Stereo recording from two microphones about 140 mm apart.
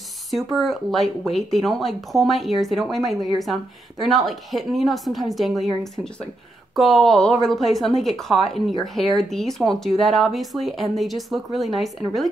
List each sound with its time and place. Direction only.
0.6 s a woman's voice: centre (ahead or behind)
6.7 s a woman's voice: centre (ahead or behind)